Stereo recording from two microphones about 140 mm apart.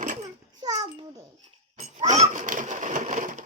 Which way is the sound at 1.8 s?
55° right (ahead or behind).